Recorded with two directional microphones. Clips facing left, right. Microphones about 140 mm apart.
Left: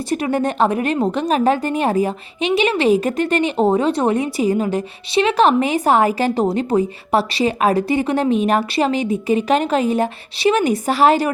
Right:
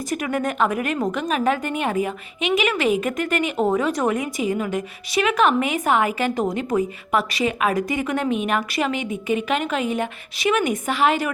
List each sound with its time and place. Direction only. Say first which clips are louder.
0.1 s a woman's voice: left 5 dB; 30° left (ahead or behind)